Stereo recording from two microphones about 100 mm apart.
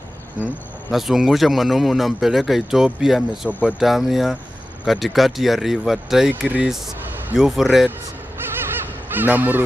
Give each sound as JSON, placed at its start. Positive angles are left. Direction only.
{"t": 0.9, "sound": "a man's voice", "side_deg": -5}
{"t": 9.1, "sound": "speech", "side_deg": -20}